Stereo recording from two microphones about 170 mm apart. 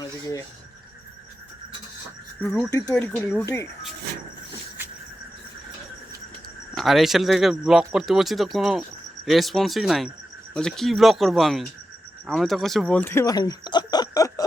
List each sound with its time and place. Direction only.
0.0 s speech: 20° left (ahead or behind)
2.4 s speech: 10° left (ahead or behind)
2.6 s speech: 20° left (ahead or behind)
2.9 s speech: 5° left (ahead or behind)
3.4 s speech: 20° left (ahead or behind)
6.7 s speech: centre (ahead or behind); by 14.4 s 20° left (ahead or behind)